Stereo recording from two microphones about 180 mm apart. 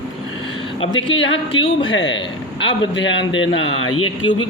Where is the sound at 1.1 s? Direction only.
90° left.